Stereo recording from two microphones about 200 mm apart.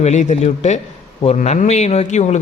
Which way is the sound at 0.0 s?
35° left (ahead or behind).